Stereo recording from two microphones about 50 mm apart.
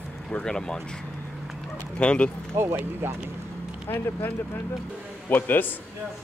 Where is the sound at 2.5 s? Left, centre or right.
Right.